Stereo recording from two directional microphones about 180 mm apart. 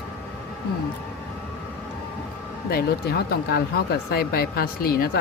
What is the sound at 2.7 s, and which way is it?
Speech, 60° left (ahead or behind).